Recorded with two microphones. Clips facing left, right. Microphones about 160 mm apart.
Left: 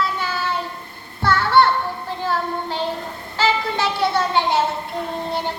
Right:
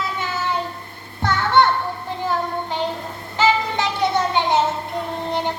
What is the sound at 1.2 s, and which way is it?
Music, 20° right (ahead or behind).